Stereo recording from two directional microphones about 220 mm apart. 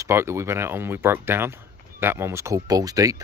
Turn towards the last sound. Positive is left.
turn(degrees=-15)  # may be behind; listen again after turning